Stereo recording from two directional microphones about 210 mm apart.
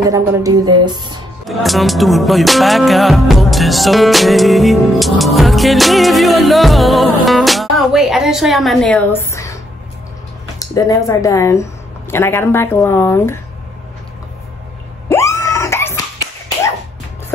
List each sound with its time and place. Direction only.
0.1 s speech: 15° right (ahead or behind)
1.4 s music: centre (ahead or behind)
10.6 s speech: 15° left (ahead or behind)
15.0 s screaming: 15° left (ahead or behind)